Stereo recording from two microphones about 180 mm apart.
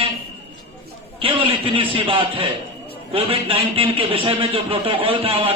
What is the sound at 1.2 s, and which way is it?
A man's voice, 30° right (ahead or behind).